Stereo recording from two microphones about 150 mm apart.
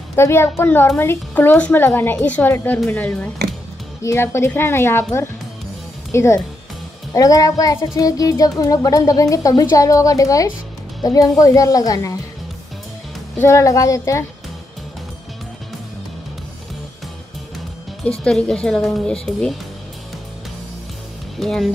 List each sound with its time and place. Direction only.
0.1 s a woman's voice: 15° left (ahead or behind)
6.1 s music: 20° left (ahead or behind)
11.0 s a woman's voice: 25° left (ahead or behind)
11.3 s music: 20° left (ahead or behind)
13.4 s music: 20° left (ahead or behind)
18.0 s speech: 5° left (ahead or behind)
21.4 s speech: centre (ahead or behind)